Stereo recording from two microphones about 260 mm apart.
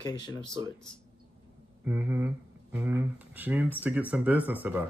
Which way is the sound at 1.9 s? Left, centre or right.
Centre.